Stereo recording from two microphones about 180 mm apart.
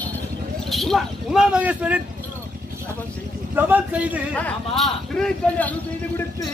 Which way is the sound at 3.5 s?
10° right (ahead or behind).